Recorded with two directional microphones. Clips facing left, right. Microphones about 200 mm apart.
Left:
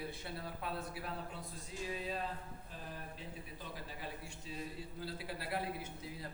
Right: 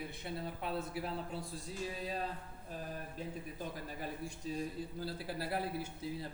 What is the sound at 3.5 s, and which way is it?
A man's voice, 45° right (ahead or behind).